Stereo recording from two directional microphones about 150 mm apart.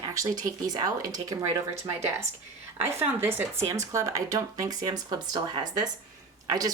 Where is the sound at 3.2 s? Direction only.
15° right (ahead or behind).